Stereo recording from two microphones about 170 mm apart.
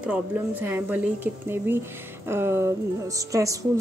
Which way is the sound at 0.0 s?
10° right (ahead or behind).